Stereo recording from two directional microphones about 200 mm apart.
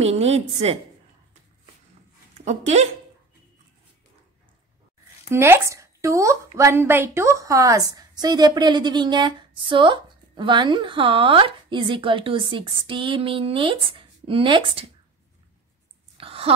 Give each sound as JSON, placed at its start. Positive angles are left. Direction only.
{"t": 0.0, "sound": "a woman's voice", "side_deg": -30}
{"t": 2.3, "sound": "speech", "side_deg": -35}
{"t": 5.3, "sound": "speech", "side_deg": -10}
{"t": 16.2, "sound": "a sound", "side_deg": -30}